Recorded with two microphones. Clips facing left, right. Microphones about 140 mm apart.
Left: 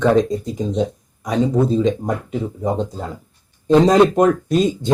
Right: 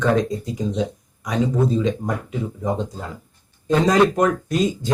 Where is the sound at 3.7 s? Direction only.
25° left (ahead or behind).